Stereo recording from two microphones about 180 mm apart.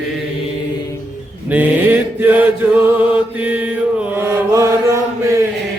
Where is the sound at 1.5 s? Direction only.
10° right (ahead or behind).